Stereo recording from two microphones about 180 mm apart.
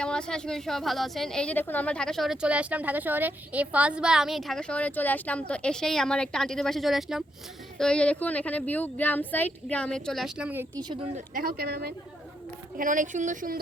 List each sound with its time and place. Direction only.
0.0 s a woman's voice: 5° left (ahead or behind)
10.8 s a woman's voice: 25° right (ahead or behind)
11.3 s speech: 55° right (ahead or behind)
12.7 s speech: 45° right (ahead or behind)